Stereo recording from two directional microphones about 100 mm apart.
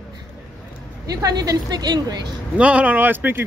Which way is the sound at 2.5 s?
10° right (ahead or behind).